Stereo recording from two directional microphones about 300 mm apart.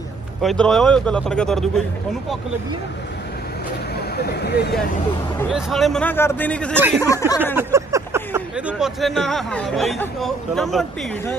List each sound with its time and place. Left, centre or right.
0.4 s speech: centre
3.9 s speech: left
5.4 s speech: centre
7.0 s a sound: centre
7.5 s speech: centre